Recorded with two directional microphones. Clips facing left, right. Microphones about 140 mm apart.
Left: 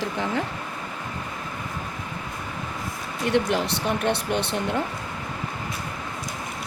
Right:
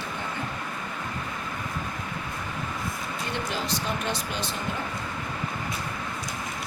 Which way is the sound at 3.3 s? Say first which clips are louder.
Left 10 dB; 70° left (ahead or behind).